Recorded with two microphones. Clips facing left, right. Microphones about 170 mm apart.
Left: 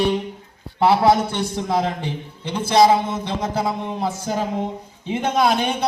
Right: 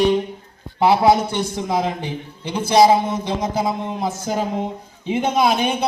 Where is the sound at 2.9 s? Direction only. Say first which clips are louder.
Right 2 dB; 15° right (ahead or behind).